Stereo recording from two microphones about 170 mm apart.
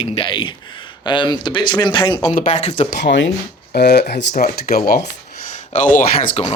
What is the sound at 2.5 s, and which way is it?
Speech, 40° left (ahead or behind).